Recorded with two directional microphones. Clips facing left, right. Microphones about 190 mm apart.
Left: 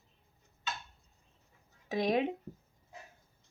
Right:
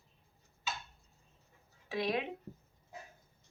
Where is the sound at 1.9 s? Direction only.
45° left (ahead or behind).